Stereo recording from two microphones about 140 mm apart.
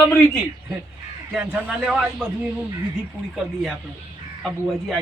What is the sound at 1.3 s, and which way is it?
Speech, 10° right (ahead or behind).